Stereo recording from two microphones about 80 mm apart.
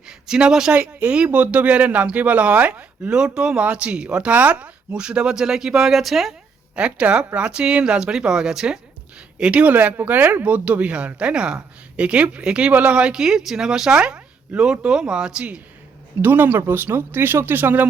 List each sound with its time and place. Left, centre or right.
0.1 s speech: centre
0.8 s speech: centre
6.7 s speech: centre
16.2 s speech: right